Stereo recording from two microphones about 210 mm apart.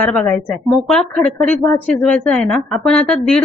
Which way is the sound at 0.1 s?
Centre (ahead or behind).